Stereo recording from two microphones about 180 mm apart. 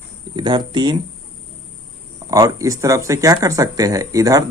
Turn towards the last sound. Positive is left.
turn(degrees=-20)  # may be behind; listen again after turning